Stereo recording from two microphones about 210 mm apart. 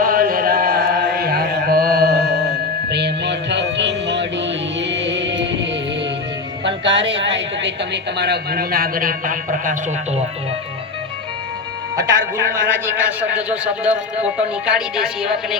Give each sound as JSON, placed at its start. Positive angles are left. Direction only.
{"t": 0.0, "sound": "chant", "side_deg": -45}
{"t": 2.9, "sound": "music", "side_deg": -55}
{"t": 6.7, "sound": "a sound", "side_deg": -60}
{"t": 8.2, "sound": "a man's voice", "side_deg": -50}
{"t": 11.9, "sound": "a man's voice", "side_deg": -15}